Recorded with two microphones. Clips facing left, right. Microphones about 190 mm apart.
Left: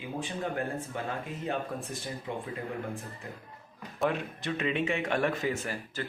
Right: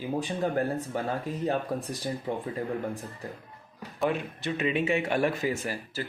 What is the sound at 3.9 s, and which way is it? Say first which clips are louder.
A man's voice: right 2 dB; centre (ahead or behind).